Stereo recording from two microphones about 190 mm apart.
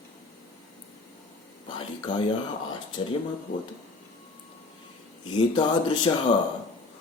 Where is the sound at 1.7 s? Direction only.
25° left (ahead or behind).